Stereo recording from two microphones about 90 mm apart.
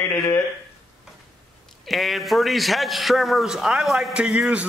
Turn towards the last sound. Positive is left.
turn(degrees=-10)  # may be behind; listen again after turning